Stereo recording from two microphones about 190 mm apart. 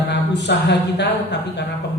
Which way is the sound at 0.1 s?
65° left (ahead or behind).